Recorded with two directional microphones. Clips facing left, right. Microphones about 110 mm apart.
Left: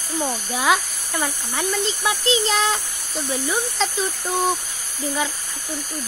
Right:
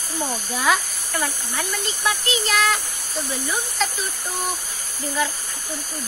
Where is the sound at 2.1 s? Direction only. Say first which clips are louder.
Left 2 dB; 30° left (ahead or behind).